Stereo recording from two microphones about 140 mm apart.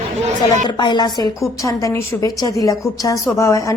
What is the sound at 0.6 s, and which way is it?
Speech, 35° left (ahead or behind).